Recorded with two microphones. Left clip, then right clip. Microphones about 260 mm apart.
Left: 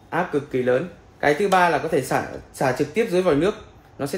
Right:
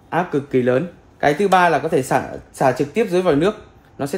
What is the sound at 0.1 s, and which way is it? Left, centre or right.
Speech, right.